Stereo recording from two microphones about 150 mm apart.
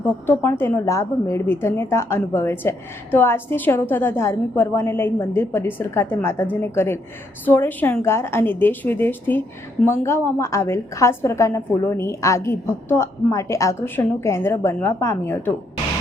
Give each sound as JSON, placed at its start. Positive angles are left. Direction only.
{"t": 0.0, "sound": "a woman's voice", "side_deg": 15}